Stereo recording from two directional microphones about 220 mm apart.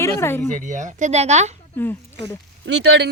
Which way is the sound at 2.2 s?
55° right (ahead or behind).